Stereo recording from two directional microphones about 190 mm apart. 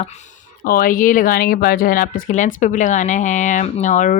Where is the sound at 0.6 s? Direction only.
50° left (ahead or behind).